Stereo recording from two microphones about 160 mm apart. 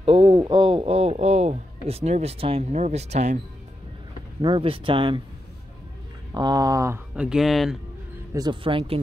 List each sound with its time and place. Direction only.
0.0 s speech: 35° right (ahead or behind)
4.4 s speech: 30° right (ahead or behind)
6.3 s speech: 25° right (ahead or behind)
7.2 s speech: 5° right (ahead or behind)
8.3 s speech: 25° right (ahead or behind)